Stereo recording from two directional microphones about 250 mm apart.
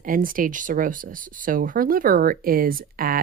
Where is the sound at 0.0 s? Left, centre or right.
Right.